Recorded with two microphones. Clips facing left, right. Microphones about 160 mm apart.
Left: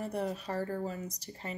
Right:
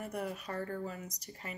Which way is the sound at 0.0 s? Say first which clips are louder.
Left 4 dB; 30° left (ahead or behind).